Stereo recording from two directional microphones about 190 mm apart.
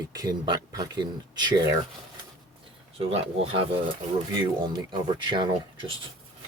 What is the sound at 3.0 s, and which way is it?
Speech, 30° right (ahead or behind).